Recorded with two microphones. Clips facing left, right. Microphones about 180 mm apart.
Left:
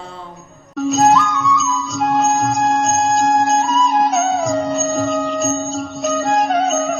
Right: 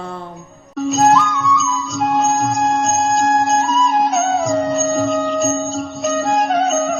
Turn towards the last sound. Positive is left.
turn(degrees=0)  # may be behind; listen again after turning